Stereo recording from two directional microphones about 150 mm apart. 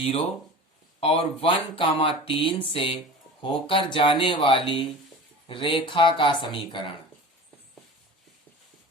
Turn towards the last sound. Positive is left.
turn(degrees=35)  # may be behind; listen again after turning